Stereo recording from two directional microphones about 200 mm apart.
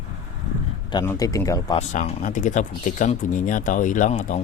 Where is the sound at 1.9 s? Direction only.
35° left (ahead or behind).